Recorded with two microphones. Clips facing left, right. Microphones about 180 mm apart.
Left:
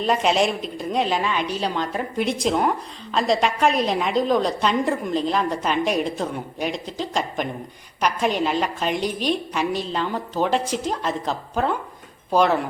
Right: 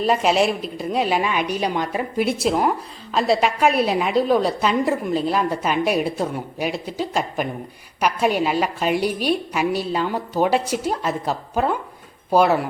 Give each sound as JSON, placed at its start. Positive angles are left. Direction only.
{"t": 0.0, "sound": "a woman's voice", "side_deg": -5}